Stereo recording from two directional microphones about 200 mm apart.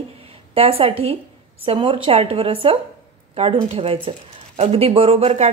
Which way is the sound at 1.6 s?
25° right (ahead or behind).